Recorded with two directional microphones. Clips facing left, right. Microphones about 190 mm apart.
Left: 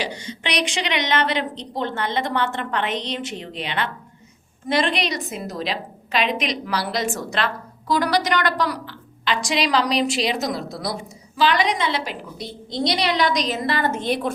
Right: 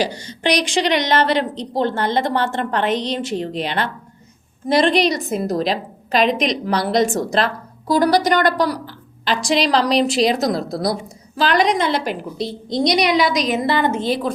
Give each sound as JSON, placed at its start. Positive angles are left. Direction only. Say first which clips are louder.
{"t": 0.0, "sound": "a woman's voice", "louder": "right 7 dB", "side_deg": -40}
{"t": 12.7, "sound": "a woman's voice", "louder": "right 5 dB", "side_deg": -15}
{"t": 13.5, "sound": "a woman's voice", "louder": "right 5 dB", "side_deg": -25}